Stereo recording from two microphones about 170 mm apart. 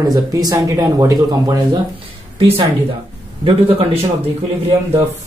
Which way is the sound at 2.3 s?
35° right (ahead or behind).